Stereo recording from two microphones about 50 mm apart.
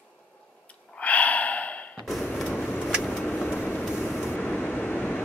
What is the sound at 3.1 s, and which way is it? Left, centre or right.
Vehicle, left.